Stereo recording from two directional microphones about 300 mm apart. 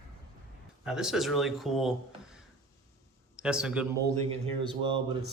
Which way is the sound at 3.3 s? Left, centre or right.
Centre.